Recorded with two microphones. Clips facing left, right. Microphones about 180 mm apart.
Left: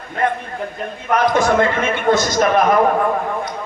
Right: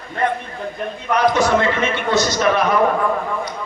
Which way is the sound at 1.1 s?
50° left (ahead or behind).